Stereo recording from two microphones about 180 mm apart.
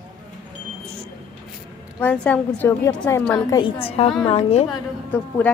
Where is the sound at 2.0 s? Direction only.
10° left (ahead or behind); by 4.6 s 35° left (ahead or behind).